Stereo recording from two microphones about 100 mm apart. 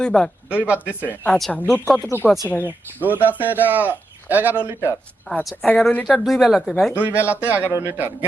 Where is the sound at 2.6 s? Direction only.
20° right (ahead or behind).